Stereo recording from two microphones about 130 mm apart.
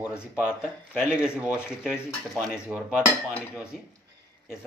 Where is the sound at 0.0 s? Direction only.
5° right (ahead or behind).